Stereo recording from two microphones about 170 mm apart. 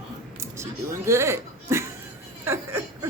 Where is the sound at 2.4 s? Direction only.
15° right (ahead or behind).